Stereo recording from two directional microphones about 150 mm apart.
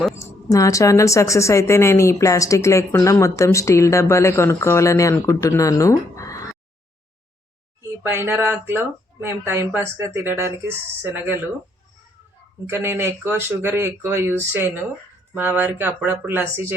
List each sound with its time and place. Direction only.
0.5 s speech: 20° left (ahead or behind)
7.8 s speech: 15° right (ahead or behind)
12.6 s speech: 15° right (ahead or behind)